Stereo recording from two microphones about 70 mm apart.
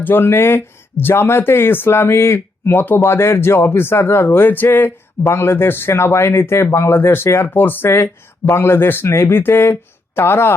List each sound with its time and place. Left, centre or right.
0.0 s speech: left